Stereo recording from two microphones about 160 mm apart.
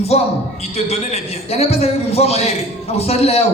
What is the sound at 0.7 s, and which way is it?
A man's voice, 40° left (ahead or behind).